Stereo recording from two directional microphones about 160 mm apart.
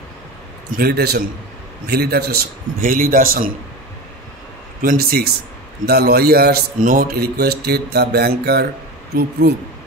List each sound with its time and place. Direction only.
0.7 s a man's voice: 80° right; by 3.5 s 60° right (ahead or behind)
4.8 s a man's voice: 70° right (ahead or behind); by 9.6 s 90° right